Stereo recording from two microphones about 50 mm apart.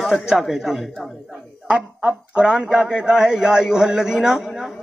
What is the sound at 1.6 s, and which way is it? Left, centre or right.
A man's voice, right.